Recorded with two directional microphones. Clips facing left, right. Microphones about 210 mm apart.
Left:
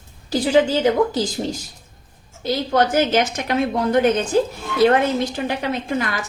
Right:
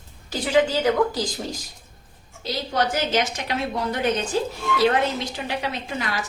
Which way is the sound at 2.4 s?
55° left (ahead or behind).